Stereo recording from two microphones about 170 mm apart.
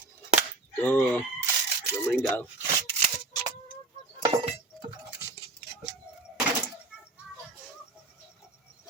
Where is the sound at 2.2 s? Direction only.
10° left (ahead or behind).